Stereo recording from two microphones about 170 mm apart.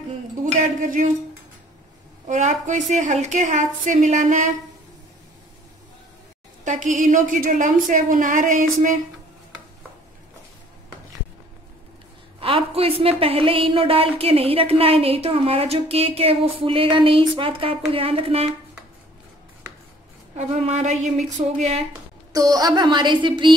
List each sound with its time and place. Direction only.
0.5 s a woman's voice: 45° right (ahead or behind)
2.2 s a woman's voice: 45° right (ahead or behind)
6.6 s a woman's voice: 45° right (ahead or behind)
12.4 s a woman's voice: 30° right (ahead or behind)
20.3 s a woman's voice: 40° right (ahead or behind)
22.3 s a woman's voice: 20° right (ahead or behind)